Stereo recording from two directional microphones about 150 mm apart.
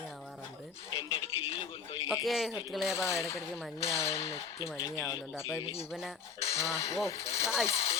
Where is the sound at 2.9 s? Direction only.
20° left (ahead or behind).